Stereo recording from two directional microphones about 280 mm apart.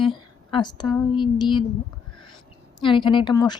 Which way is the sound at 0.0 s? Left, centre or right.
Centre.